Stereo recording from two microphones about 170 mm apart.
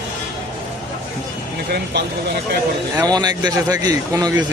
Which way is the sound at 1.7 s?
75° right (ahead or behind).